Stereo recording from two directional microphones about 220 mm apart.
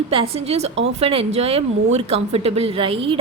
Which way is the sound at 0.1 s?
25° right (ahead or behind).